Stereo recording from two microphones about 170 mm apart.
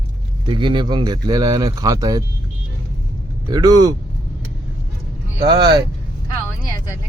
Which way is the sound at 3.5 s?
25° right (ahead or behind).